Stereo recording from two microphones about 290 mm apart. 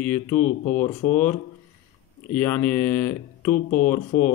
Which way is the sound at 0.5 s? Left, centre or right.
Left.